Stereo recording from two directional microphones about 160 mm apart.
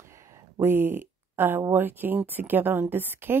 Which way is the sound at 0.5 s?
15° right (ahead or behind).